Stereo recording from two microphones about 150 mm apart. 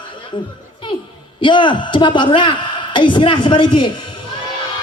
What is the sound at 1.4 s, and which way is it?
A man's voice, 35° left (ahead or behind).